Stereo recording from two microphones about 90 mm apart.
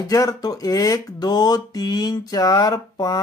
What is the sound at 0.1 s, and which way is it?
Speech, 40° left (ahead or behind).